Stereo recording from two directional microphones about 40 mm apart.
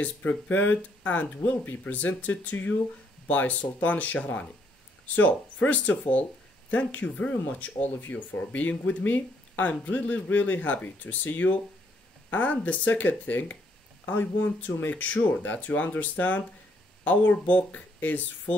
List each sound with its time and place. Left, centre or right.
0.0 s speech: left
0.5 s speech: left